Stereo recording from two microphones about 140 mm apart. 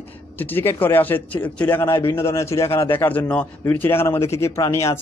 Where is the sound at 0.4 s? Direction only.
15° left (ahead or behind).